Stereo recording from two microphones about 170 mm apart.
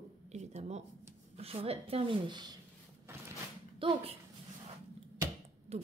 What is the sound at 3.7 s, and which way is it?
Speech, 30° right (ahead or behind).